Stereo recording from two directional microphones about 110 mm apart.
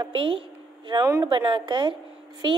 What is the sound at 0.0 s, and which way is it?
A woman's voice, 50° right (ahead or behind).